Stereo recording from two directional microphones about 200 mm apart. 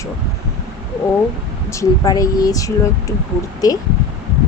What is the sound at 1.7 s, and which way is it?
Speech, 15° left (ahead or behind).